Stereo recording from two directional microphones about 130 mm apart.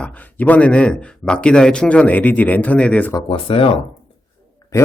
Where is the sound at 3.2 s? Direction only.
45° left (ahead or behind).